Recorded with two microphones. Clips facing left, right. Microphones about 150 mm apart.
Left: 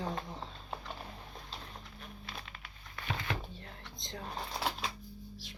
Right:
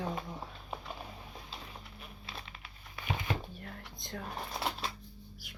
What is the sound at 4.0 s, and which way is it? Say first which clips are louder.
Music: right 2 dB; 20° left (ahead or behind).